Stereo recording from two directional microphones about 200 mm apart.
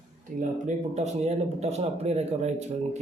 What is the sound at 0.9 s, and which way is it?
Speech, 35° right (ahead or behind).